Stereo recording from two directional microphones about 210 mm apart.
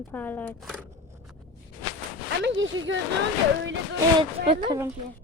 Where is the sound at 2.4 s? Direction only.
60° right (ahead or behind).